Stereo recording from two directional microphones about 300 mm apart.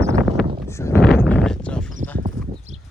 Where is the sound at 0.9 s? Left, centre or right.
Centre.